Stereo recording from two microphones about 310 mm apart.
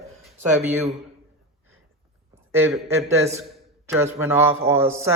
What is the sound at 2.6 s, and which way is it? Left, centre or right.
A man's voice, centre.